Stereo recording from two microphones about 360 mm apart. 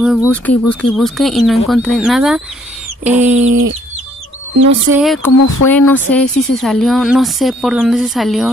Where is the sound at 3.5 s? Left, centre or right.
Right.